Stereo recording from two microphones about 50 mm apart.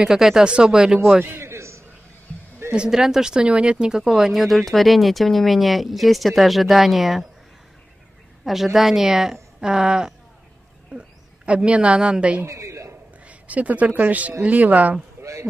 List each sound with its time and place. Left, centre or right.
0.0 s speech: centre
1.2 s a sound: right
2.9 s speech: centre
8.7 s speech: centre; by 12.4 s right
12.4 s a man's voice: right
13.3 s speech: right
15.2 s a sound: right